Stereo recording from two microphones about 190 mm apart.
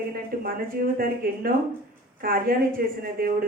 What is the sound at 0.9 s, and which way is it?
Speech, 50° right (ahead or behind).